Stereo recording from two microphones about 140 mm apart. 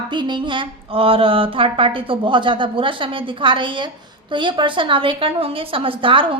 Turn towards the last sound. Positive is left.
turn(degrees=-40)  # may be behind; listen again after turning